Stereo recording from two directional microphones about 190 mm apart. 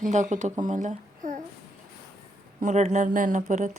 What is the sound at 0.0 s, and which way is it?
A woman's voice, 40° right (ahead or behind).